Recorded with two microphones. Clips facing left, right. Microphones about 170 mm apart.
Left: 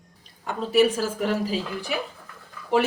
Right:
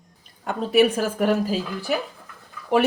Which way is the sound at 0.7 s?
55° right (ahead or behind).